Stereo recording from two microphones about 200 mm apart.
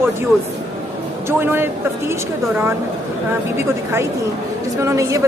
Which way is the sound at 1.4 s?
10° right (ahead or behind).